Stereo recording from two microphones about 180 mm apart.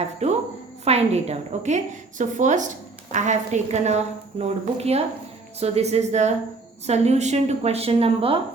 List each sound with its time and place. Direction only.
0.2 s a woman's voice: 35° right (ahead or behind)